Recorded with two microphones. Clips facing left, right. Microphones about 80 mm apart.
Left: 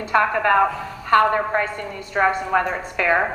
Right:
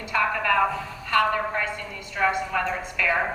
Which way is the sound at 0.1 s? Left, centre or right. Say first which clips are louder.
Left 6 dB; left.